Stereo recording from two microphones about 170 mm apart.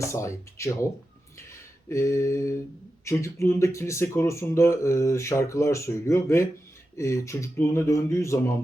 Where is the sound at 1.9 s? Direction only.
15° left (ahead or behind).